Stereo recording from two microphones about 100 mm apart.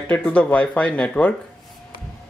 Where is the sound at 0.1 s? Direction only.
10° left (ahead or behind).